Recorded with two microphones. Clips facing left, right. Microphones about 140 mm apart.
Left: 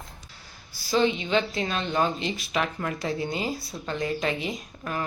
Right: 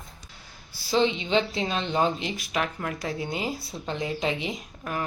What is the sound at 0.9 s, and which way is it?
Speech, 25° right (ahead or behind).